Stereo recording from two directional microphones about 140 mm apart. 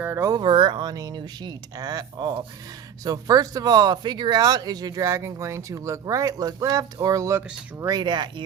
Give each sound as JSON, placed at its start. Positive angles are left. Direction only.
{"t": 0.0, "sound": "speech", "side_deg": -20}